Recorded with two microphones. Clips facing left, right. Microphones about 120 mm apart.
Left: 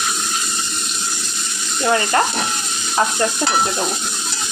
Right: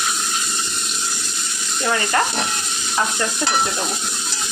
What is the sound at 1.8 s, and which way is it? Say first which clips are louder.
Speech: left 4 dB; 30° left (ahead or behind).